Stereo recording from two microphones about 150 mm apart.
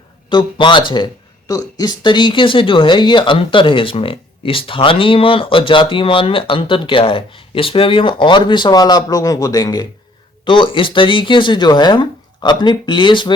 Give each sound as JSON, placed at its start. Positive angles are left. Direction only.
{"t": 0.3, "sound": "speech", "side_deg": 30}